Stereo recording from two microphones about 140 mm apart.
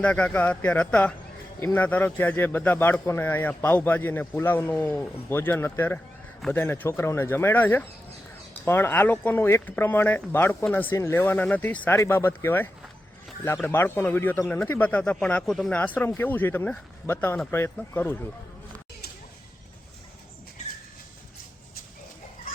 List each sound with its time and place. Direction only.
0.0 s a man's voice: 10° left (ahead or behind)
16.0 s a man's voice: 15° left (ahead or behind)